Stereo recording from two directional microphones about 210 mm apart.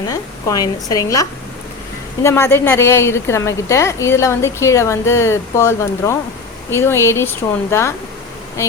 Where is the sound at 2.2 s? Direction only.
10° left (ahead or behind).